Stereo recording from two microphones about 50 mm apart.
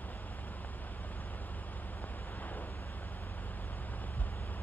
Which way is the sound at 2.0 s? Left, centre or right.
Left.